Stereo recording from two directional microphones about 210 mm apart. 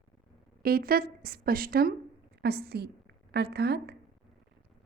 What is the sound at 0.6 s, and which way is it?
A woman's voice, 45° right (ahead or behind).